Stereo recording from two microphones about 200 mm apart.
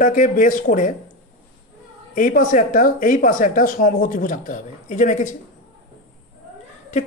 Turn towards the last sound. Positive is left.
turn(degrees=40)  # may be behind; listen again after turning